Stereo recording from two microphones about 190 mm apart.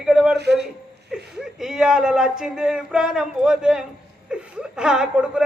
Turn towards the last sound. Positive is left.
turn(degrees=-5)  # may be behind; listen again after turning